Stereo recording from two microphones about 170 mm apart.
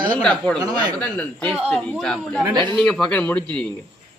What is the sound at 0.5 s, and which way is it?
Speech, 25° right (ahead or behind).